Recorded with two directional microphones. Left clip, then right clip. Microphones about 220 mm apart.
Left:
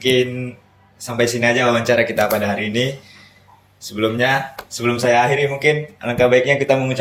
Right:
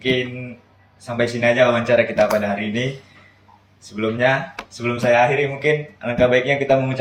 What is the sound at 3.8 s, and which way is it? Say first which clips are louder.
Speech: left 2 dB; 45° left (ahead or behind).